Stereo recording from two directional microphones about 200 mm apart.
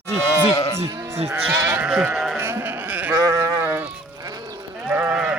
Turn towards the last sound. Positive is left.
turn(degrees=-10)  # may be behind; listen again after turning